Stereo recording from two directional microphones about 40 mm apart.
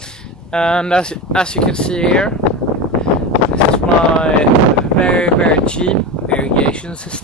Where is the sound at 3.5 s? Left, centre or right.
Left.